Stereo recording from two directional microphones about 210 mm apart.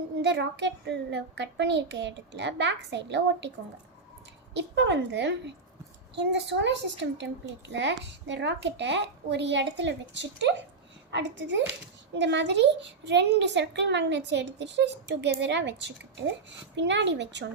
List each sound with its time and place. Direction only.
0.2 s a woman's voice: 55° right (ahead or behind)
4.5 s a woman's voice: 60° right (ahead or behind)